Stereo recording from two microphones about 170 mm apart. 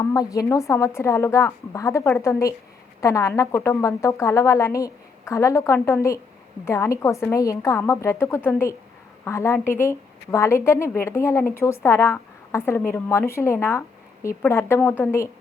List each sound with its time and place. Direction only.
0.0 s speech: 20° left (ahead or behind)